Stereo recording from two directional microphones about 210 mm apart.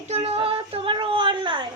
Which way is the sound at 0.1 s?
30° right (ahead or behind).